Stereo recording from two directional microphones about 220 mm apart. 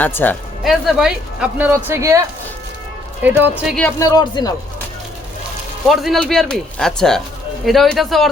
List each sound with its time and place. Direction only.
0.0 s speech: 10° left (ahead or behind); by 2.2 s 15° right (ahead or behind)
3.2 s speech: 10° right (ahead or behind)
3.8 s speech: 10° left (ahead or behind)
5.9 s speech: centre (ahead or behind)